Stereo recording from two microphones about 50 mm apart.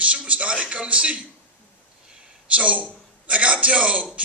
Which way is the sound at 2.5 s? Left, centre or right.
Right.